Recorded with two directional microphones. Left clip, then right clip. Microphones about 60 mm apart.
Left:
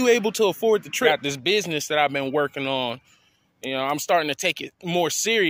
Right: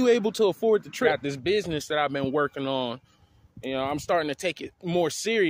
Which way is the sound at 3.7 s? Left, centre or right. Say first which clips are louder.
Left 4 dB; centre.